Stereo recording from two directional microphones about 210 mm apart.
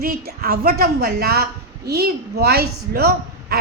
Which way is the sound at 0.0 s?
45° right (ahead or behind).